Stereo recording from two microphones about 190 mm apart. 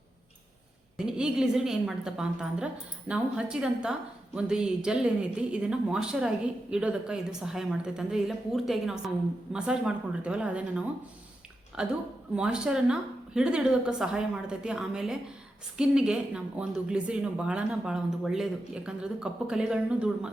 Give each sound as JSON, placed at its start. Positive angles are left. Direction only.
{"t": 0.9, "sound": "speech", "side_deg": -5}